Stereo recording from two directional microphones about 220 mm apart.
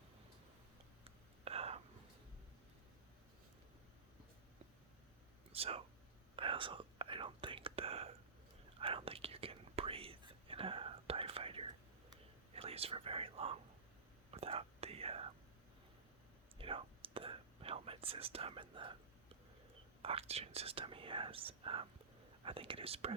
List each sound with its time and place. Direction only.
1.0 s whispering: 25° right (ahead or behind)
5.5 s whispering: 25° right (ahead or behind)
16.6 s whispering: 25° right (ahead or behind)
20.0 s whispering: 25° right (ahead or behind)